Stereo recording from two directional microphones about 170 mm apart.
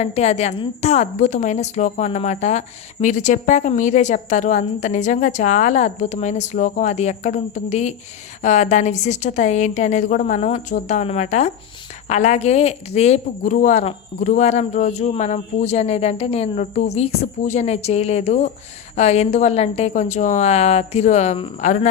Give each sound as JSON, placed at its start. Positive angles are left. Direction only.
{"t": 0.0, "sound": "a woman's voice", "side_deg": 40}